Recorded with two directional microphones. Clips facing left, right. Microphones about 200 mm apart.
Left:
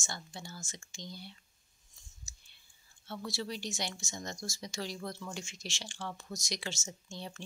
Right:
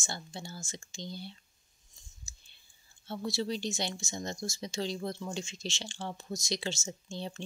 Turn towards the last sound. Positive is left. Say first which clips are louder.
# right 5 dB
turn(degrees=-25)  # may be behind; listen again after turning